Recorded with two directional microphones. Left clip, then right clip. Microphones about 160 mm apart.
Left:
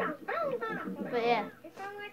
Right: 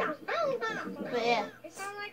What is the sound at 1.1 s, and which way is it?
Speech, 25° left (ahead or behind).